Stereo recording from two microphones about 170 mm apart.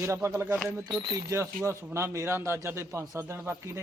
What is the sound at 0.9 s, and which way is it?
Speech, 30° right (ahead or behind).